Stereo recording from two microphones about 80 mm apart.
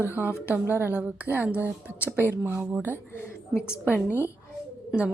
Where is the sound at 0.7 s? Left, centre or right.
Right.